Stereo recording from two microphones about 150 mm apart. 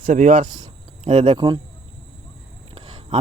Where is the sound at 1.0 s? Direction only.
45° right (ahead or behind).